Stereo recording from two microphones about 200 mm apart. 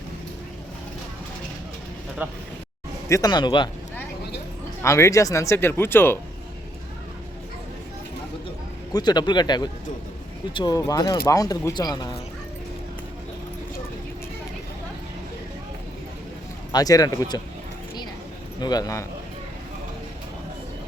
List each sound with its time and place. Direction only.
3.1 s speech: 20° left (ahead or behind)
4.8 s speech: 15° left (ahead or behind)
8.9 s speech: 20° left (ahead or behind)
16.7 s speech: 20° left (ahead or behind)
18.6 s speech: 20° left (ahead or behind)